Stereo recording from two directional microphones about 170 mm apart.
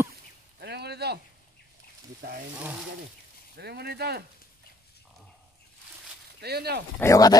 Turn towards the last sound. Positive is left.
turn(degrees=20)  # may be behind; listen again after turning